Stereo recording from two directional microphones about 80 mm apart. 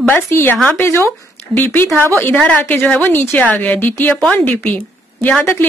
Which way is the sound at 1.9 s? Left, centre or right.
Right.